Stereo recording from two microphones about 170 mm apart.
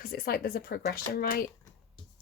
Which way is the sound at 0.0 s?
60° left (ahead or behind).